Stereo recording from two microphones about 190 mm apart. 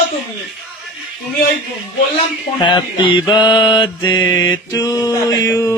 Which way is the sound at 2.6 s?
25° left (ahead or behind).